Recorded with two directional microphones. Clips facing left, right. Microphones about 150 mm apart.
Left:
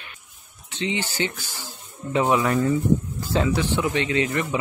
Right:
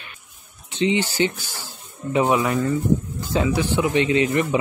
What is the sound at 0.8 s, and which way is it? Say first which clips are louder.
Speech: right 6 dB; 20° right (ahead or behind).